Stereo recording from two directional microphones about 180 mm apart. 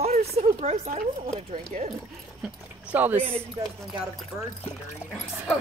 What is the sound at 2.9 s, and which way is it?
Speech, 10° right (ahead or behind).